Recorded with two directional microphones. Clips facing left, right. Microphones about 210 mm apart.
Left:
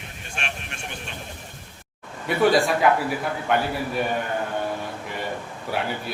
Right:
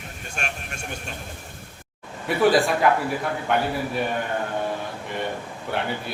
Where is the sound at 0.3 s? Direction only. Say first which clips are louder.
Right 1 dB; 45° right (ahead or behind).